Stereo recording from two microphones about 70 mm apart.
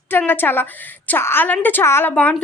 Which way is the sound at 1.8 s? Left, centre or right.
Left.